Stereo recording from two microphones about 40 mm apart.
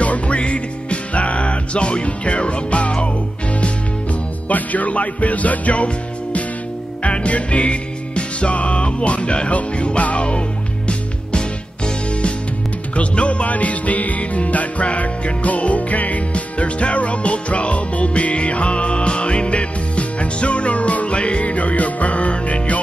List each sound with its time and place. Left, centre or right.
0.0 s music: left
7.0 s music: left